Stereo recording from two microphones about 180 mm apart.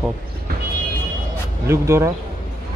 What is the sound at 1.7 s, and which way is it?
Speech, 15° right (ahead or behind).